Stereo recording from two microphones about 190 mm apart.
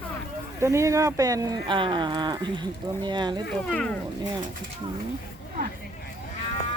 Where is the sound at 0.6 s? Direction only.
15° right (ahead or behind).